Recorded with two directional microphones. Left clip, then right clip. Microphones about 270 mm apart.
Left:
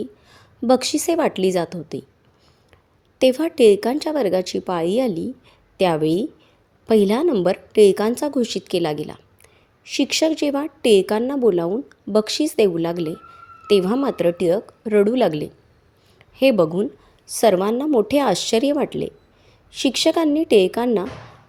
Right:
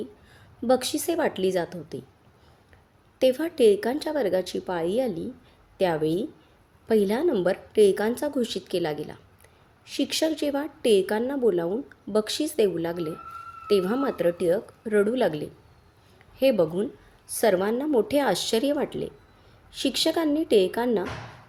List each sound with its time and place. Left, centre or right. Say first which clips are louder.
0.0 s a woman's voice: left 6 dB; left
3.2 s a woman's voice: left 6 dB; left